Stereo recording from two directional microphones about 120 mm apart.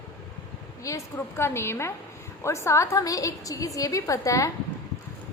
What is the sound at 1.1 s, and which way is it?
A woman's voice, 20° left (ahead or behind).